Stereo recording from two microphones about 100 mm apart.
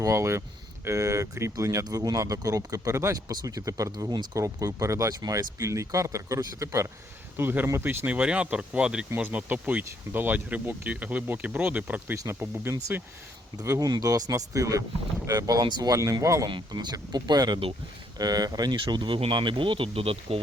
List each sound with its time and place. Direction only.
0.0 s speech: 30° right (ahead or behind)
12.1 s speech: 25° right (ahead or behind)
13.6 s speech: 35° right (ahead or behind)
16.5 s speech: 50° right (ahead or behind); by 20.4 s 75° right (ahead or behind)